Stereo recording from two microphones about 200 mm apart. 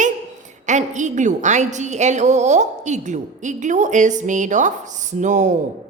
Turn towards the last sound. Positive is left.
turn(degrees=-35)  # may be behind; listen again after turning